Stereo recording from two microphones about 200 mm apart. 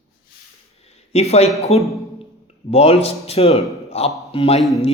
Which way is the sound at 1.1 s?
30° left (ahead or behind).